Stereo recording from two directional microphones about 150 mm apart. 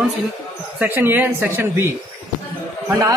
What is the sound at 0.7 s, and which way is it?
A man's voice, 15° right (ahead or behind).